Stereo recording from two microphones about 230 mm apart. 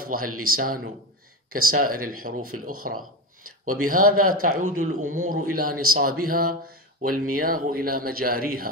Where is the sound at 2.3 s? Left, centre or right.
Right.